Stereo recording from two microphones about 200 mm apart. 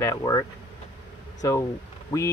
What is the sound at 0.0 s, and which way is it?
Speech, 15° left (ahead or behind).